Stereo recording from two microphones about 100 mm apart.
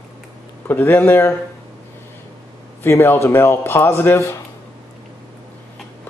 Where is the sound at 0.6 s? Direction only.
20° left (ahead or behind).